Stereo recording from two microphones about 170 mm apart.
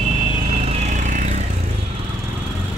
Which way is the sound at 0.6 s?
40° right (ahead or behind).